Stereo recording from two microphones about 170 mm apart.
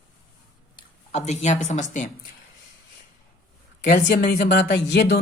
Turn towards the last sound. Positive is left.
turn(degrees=70)  # may be behind; listen again after turning